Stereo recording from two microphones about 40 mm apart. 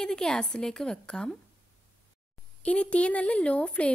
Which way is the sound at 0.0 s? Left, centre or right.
Centre.